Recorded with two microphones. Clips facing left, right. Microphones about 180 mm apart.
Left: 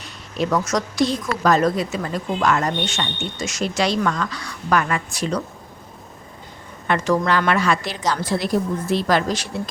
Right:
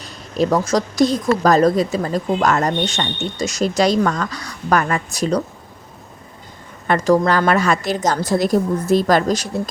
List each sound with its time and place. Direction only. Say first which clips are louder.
0.0 s speech: right 5 dB; 35° right (ahead or behind)
6.8 s a woman's voice: right 4 dB; 40° right (ahead or behind)